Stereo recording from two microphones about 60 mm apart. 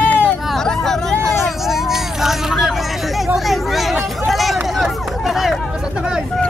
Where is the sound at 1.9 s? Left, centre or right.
Centre.